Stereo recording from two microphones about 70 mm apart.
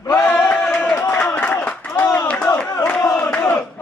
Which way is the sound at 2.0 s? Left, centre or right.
Left.